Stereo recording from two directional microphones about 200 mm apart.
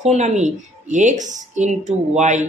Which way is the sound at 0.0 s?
35° right (ahead or behind).